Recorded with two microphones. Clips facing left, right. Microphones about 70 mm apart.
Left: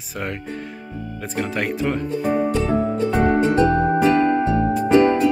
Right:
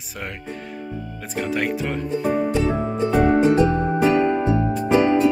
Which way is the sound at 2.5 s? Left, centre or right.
Centre.